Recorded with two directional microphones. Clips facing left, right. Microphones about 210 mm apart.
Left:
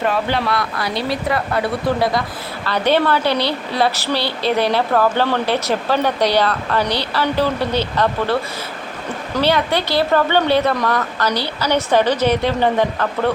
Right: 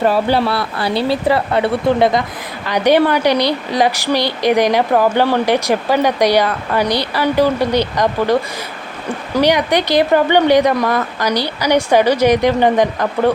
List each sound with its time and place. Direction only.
0.1 s a woman's voice: 35° right (ahead or behind); by 8.4 s 15° right (ahead or behind)
9.4 s a woman's voice: 15° right (ahead or behind)